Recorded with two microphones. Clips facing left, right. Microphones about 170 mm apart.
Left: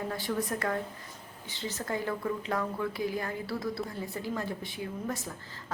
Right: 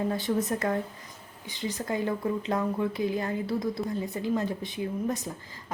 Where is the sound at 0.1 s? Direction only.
20° right (ahead or behind).